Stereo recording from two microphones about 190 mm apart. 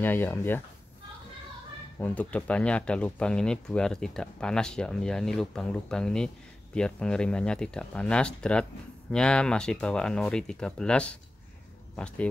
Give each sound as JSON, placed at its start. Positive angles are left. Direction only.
{"t": 0.0, "sound": "speech", "side_deg": 10}
{"t": 2.0, "sound": "speech", "side_deg": 5}